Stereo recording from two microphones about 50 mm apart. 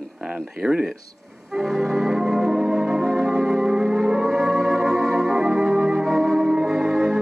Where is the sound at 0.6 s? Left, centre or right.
Centre.